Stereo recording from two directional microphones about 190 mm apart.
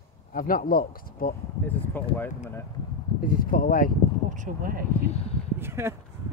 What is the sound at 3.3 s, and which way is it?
Speech, 50° left (ahead or behind).